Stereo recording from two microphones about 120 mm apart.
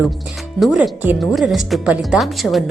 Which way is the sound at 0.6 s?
10° right (ahead or behind).